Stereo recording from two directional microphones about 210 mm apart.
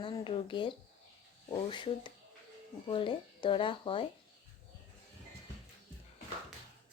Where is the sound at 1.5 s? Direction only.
20° left (ahead or behind).